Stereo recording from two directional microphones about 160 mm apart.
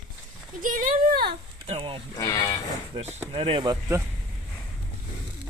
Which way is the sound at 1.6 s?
35° right (ahead or behind).